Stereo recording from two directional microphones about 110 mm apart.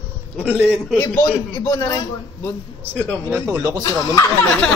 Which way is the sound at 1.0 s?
35° left (ahead or behind).